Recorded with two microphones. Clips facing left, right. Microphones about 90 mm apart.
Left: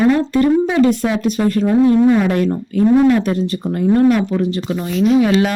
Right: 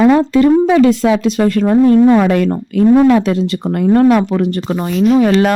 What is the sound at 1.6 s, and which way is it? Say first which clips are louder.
Speech: right 3 dB; 60° right (ahead or behind).